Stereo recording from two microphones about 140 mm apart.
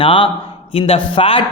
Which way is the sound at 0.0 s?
40° left (ahead or behind).